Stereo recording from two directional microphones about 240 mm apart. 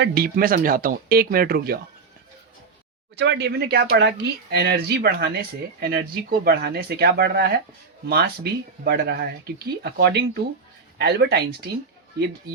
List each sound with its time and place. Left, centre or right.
0.0 s speech: right
3.2 s speech: right